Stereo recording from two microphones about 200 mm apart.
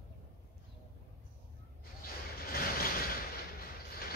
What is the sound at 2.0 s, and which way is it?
Vehicle, 50° left (ahead or behind).